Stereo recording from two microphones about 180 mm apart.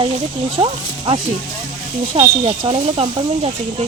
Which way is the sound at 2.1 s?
30° right (ahead or behind).